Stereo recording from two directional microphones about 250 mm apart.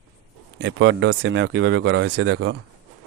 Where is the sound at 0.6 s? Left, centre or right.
Right.